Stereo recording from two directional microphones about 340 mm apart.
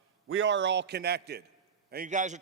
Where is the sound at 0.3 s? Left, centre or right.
Right.